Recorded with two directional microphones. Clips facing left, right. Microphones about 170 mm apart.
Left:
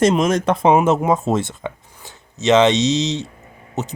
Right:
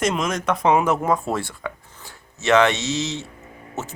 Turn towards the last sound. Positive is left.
turn(degrees=20)  # may be behind; listen again after turning